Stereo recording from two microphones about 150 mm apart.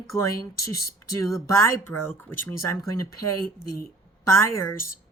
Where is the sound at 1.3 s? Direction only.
20° left (ahead or behind).